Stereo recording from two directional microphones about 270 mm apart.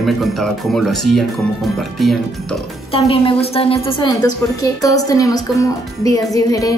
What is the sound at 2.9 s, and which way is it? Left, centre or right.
A woman's voice, centre.